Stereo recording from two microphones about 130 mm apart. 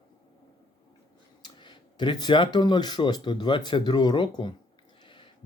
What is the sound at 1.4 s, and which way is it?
Speech, 35° left (ahead or behind).